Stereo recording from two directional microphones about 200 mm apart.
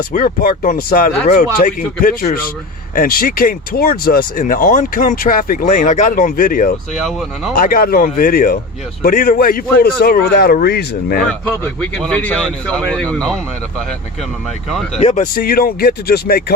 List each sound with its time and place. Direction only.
0.1 s speech: 40° left (ahead or behind)
6.9 s speech: centre (ahead or behind)
7.5 s speech: 45° left (ahead or behind)
11.2 s speech: 5° left (ahead or behind)
14.9 s speech: 30° left (ahead or behind)
15.4 s speech: 50° left (ahead or behind)